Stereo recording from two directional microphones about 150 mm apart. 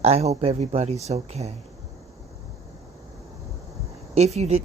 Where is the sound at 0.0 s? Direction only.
45° right (ahead or behind).